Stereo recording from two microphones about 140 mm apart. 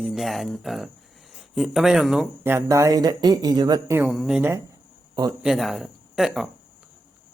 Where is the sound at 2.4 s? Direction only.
20° right (ahead or behind).